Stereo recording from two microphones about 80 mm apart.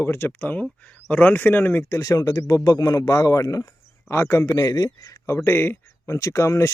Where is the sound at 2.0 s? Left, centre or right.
Left.